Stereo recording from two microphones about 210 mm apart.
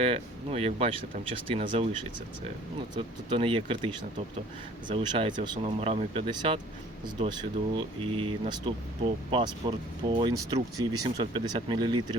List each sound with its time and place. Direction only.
0.0 s speech: 30° right (ahead or behind)
2.9 s speech: 25° right (ahead or behind)
7.8 s speech: 25° right (ahead or behind)